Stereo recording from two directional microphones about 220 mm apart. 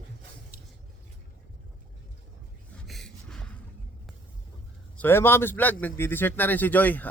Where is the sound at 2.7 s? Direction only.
Centre (ahead or behind).